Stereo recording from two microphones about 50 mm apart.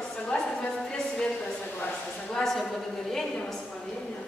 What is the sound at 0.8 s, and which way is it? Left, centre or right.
Speech, centre.